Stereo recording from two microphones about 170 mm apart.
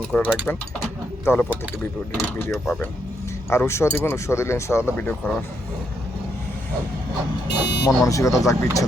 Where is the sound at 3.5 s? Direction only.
15° left (ahead or behind).